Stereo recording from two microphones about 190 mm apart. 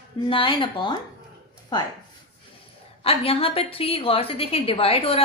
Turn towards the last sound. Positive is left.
turn(degrees=30)  # may be behind; listen again after turning